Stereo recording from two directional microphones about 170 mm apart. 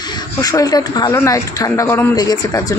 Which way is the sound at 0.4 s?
20° left (ahead or behind).